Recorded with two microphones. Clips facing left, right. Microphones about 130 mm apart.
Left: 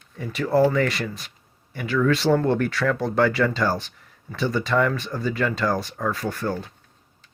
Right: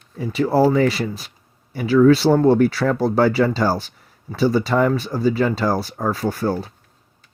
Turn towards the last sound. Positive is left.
turn(degrees=-35)  # may be behind; listen again after turning